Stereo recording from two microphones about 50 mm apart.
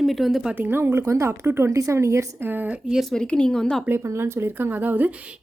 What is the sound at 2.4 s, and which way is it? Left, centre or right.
Speech, right.